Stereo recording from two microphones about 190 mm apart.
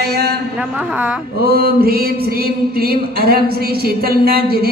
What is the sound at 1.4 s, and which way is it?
Mantra, 55° right (ahead or behind).